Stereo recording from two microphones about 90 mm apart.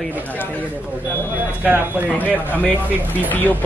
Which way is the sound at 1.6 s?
20° right (ahead or behind).